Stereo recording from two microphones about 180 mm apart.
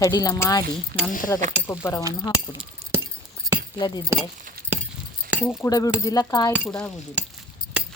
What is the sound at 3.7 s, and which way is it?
Speech, 25° left (ahead or behind).